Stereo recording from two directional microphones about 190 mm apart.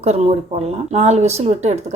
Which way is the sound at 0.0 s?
35° right (ahead or behind).